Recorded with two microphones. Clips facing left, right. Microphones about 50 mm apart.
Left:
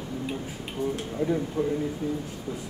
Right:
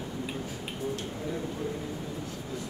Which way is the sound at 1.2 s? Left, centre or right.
Left.